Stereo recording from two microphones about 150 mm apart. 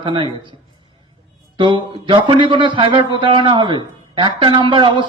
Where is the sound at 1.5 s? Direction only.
35° right (ahead or behind).